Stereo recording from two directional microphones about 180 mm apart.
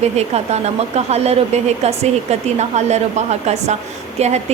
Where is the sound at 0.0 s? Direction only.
35° right (ahead or behind).